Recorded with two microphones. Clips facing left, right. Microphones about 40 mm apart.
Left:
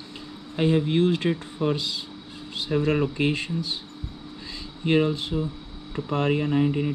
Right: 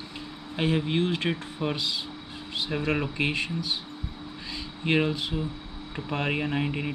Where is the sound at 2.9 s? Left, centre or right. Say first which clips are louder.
Left 3 dB; right.